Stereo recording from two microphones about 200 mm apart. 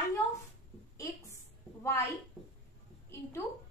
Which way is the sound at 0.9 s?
15° left (ahead or behind).